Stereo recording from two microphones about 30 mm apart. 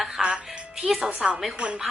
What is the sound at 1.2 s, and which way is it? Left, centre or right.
Speech, centre.